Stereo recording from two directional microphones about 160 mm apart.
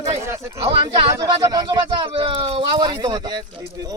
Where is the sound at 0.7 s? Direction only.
35° right (ahead or behind).